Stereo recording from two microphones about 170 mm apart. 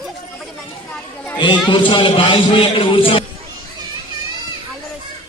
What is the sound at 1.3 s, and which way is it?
A man's voice, 25° left (ahead or behind).